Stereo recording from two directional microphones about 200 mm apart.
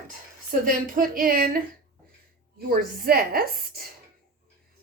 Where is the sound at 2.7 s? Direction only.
45° right (ahead or behind).